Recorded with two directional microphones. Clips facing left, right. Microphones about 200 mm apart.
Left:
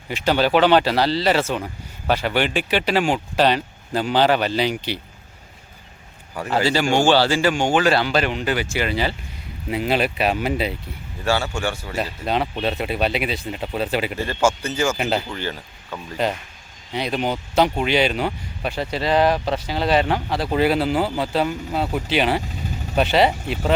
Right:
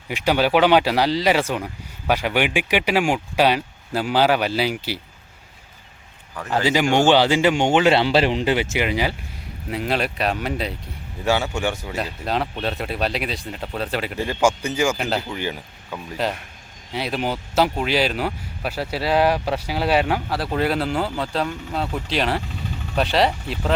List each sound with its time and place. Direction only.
0.1 s speech: 10° right (ahead or behind)
6.3 s speech: 10° left (ahead or behind)
6.9 s speech: 20° right (ahead or behind)
9.6 s speech: centre (ahead or behind)
11.2 s speech: 15° right (ahead or behind)
11.9 s speech: centre (ahead or behind)
14.2 s speech: 15° right (ahead or behind)
14.9 s speech: centre (ahead or behind)
15.3 s speech: 15° right (ahead or behind)
16.1 s speech: centre (ahead or behind)